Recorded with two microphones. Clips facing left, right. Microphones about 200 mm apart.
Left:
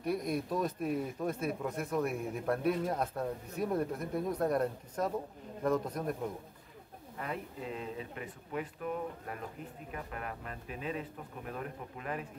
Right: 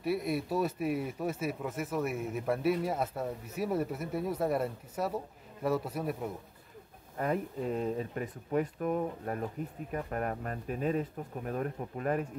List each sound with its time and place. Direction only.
0.0 s speech: 5° right (ahead or behind)
7.2 s speech: 45° right (ahead or behind)